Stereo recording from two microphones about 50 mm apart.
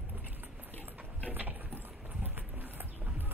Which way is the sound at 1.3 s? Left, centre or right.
Right.